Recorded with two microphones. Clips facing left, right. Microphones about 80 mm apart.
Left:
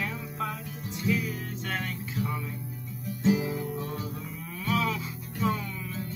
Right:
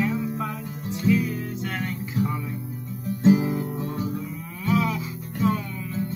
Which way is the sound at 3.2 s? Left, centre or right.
Right.